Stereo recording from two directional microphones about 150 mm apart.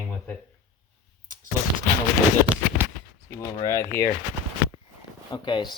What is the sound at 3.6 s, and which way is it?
Speech, 20° left (ahead or behind).